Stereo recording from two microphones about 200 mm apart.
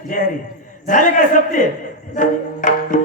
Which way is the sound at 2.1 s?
40° left (ahead or behind).